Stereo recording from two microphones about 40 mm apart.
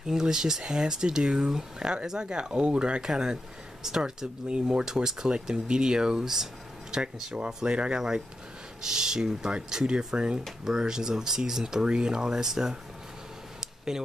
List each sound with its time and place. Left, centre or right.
0.0 s speech: centre
7.3 s speech: right
13.6 s a sound: centre